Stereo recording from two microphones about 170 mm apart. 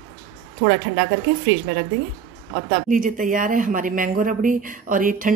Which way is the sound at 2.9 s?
50° right (ahead or behind).